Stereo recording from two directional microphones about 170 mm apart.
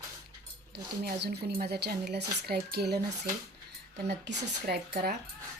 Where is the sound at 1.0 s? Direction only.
70° right (ahead or behind).